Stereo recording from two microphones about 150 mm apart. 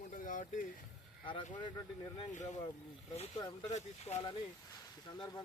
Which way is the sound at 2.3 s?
55° left (ahead or behind).